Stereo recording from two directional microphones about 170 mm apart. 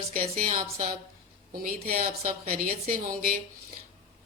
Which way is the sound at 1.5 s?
60° right (ahead or behind).